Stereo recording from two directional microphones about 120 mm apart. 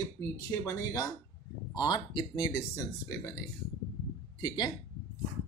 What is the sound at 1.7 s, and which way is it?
Speech, 35° left (ahead or behind).